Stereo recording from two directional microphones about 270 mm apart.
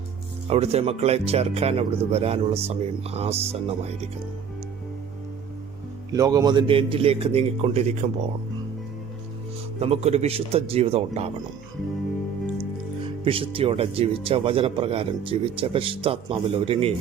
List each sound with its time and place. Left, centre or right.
0.4 s speech: right
6.1 s speech: centre
9.8 s speech: right
13.2 s speech: centre